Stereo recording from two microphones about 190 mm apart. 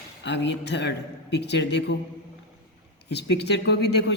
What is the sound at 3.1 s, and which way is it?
Speech, 60° left (ahead or behind).